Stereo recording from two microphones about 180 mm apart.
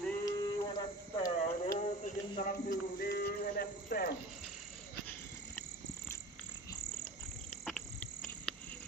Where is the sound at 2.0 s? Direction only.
50° left (ahead or behind).